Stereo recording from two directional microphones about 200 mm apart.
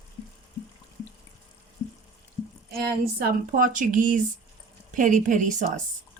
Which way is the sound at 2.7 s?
50° right (ahead or behind).